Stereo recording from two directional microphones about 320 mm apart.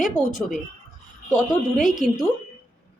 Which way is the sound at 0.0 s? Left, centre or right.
Centre.